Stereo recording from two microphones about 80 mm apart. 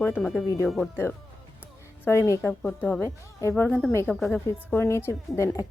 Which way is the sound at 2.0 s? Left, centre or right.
Left.